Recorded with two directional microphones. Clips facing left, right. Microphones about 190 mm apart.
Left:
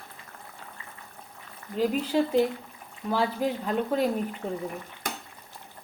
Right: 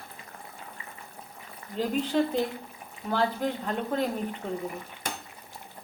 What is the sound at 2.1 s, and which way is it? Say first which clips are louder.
A woman's voice: left 4 dB; 10° left (ahead or behind).